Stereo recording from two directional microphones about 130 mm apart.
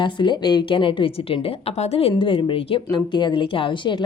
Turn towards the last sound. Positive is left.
turn(degrees=40)  # may be behind; listen again after turning